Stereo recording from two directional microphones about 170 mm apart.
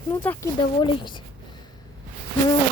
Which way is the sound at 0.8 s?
30° left (ahead or behind).